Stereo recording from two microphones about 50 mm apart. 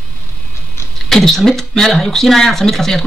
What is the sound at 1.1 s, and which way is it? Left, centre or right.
Speech, centre.